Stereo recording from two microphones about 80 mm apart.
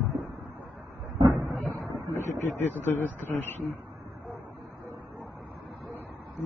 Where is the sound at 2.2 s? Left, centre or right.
Left.